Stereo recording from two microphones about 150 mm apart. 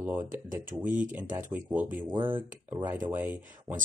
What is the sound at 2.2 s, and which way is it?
Speech, 35° right (ahead or behind).